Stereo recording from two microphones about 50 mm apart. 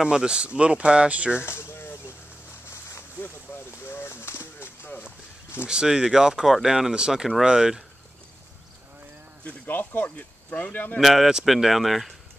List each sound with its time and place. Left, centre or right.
0.0 s speech: centre
1.4 s a sound: left
3.7 s a sound: left
5.7 s speech: centre
9.4 s speech: left
11.0 s speech: centre